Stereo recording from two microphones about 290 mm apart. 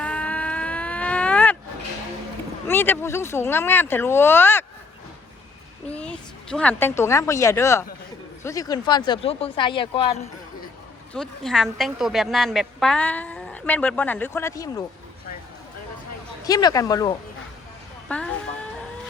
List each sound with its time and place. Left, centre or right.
0.0 s moo: centre
2.6 s speech: centre
6.0 s a woman's voice: centre
11.1 s a woman's voice: centre
16.5 s speech: centre